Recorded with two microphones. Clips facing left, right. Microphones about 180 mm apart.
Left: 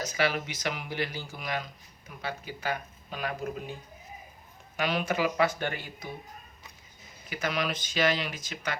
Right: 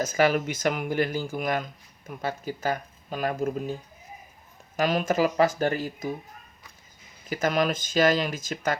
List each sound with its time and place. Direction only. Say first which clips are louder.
0.0 s speech: right 7 dB; 45° right (ahead or behind)
4.8 s speech: right 5 dB; 45° right (ahead or behind)
7.3 s speech: right 7 dB; 45° right (ahead or behind)